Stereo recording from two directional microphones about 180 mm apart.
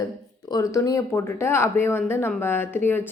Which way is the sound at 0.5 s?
20° left (ahead or behind).